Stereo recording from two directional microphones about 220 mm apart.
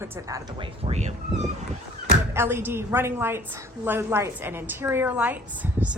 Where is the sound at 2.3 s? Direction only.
10° right (ahead or behind).